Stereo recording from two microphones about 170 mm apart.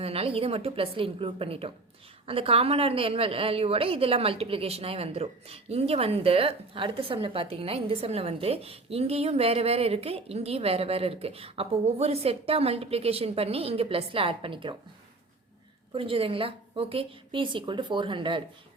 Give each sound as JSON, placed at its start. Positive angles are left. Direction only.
{"t": 0.0, "sound": "a woman's voice", "side_deg": -35}
{"t": 16.0, "sound": "a woman's voice", "side_deg": -30}